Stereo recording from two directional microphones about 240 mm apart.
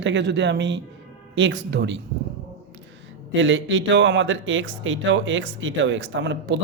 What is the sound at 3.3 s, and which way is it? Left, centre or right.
Speech, right.